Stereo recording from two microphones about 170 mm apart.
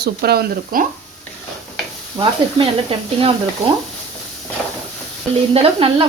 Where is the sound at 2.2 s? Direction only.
30° right (ahead or behind).